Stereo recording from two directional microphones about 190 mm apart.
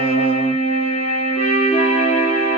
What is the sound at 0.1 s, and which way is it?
Music, 35° left (ahead or behind).